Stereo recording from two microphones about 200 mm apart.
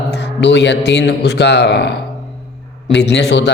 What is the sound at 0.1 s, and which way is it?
A man's voice, 60° left (ahead or behind).